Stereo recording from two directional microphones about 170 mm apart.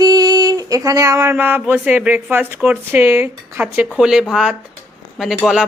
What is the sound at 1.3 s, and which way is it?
Speech, 10° right (ahead or behind).